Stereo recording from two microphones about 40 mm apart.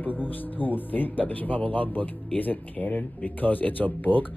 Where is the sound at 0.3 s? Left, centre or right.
Left.